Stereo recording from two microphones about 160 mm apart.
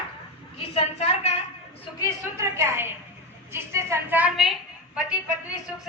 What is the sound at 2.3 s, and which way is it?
A woman's voice, 15° right (ahead or behind).